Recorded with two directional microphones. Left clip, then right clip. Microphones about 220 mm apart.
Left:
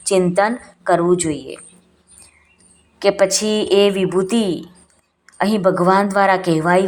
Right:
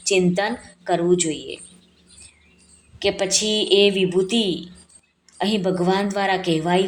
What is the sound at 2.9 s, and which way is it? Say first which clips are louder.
Speech: left 6 dB; 15° left (ahead or behind).